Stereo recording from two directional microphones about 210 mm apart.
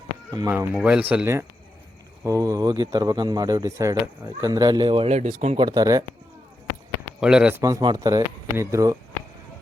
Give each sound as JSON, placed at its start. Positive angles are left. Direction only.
{"t": 0.3, "sound": "speech", "side_deg": -15}
{"t": 5.6, "sound": "speech", "side_deg": -15}
{"t": 7.2, "sound": "speech", "side_deg": -5}
{"t": 7.6, "sound": "speech", "side_deg": -20}